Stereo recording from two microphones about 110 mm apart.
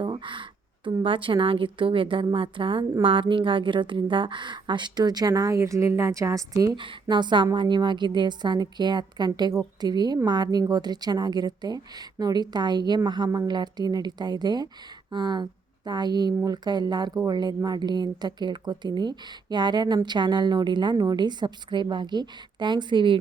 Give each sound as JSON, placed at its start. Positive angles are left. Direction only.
{"t": 0.0, "sound": "a sound", "side_deg": -45}
{"t": 1.0, "sound": "a woman's voice", "side_deg": -50}
{"t": 6.7, "sound": "a woman's voice", "side_deg": -45}